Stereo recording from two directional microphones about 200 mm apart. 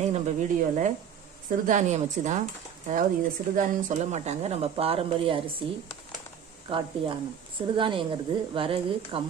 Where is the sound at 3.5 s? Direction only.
35° right (ahead or behind).